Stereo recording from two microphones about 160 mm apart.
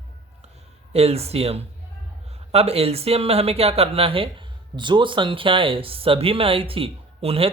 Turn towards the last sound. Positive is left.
turn(degrees=-35)  # may be behind; listen again after turning